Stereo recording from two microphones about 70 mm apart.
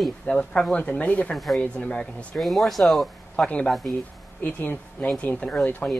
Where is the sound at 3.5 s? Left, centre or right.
Centre.